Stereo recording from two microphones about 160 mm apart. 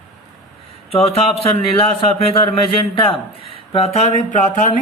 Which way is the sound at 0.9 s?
35° left (ahead or behind).